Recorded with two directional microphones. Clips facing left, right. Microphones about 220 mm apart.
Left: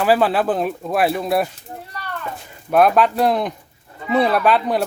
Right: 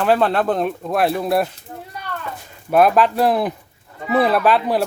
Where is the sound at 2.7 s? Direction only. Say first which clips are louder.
Even; centre (ahead or behind).